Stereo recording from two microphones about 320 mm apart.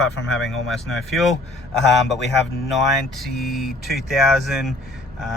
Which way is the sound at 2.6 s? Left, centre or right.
Centre.